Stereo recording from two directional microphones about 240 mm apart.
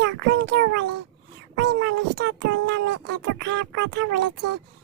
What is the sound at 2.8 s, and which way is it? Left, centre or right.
Speech, right.